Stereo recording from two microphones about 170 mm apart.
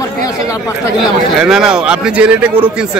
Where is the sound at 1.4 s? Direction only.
5° right (ahead or behind).